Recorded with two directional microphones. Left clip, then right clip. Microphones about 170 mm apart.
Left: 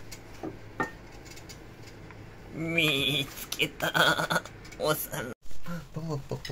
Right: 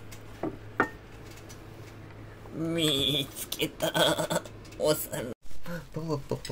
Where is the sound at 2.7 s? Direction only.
Centre (ahead or behind).